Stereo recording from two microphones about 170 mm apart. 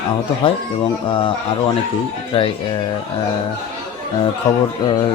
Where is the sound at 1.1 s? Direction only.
30° left (ahead or behind).